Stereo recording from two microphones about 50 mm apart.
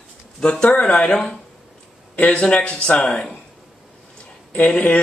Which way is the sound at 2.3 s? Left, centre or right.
Centre.